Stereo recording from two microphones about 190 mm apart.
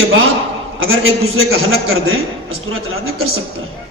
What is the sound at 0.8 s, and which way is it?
A man's voice, 90° right.